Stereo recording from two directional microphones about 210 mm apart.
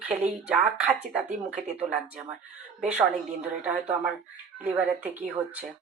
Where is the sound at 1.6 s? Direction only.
30° right (ahead or behind).